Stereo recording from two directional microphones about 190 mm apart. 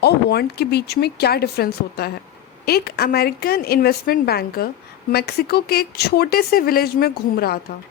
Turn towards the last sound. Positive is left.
turn(degrees=55)  # may be behind; listen again after turning